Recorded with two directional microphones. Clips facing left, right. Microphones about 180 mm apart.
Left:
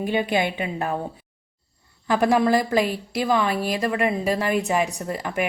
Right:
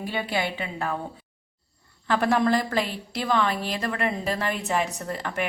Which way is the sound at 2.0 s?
15° left (ahead or behind).